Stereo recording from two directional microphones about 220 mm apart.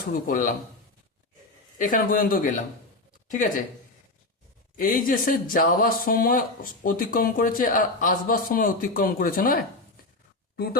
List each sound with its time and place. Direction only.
0.3 s speech: 35° left (ahead or behind)
1.8 s speech: 40° left (ahead or behind)
4.8 s speech: 40° left (ahead or behind)